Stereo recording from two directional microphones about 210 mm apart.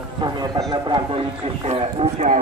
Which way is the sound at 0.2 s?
20° right (ahead or behind).